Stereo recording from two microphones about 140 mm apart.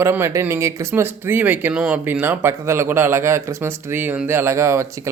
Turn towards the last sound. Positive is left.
turn(degrees=-20)  # may be behind; listen again after turning